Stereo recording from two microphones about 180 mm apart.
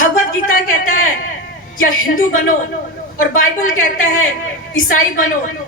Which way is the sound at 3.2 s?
45° left (ahead or behind).